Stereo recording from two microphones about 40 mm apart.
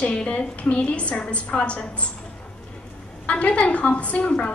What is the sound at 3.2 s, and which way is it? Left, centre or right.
A woman's voice, left.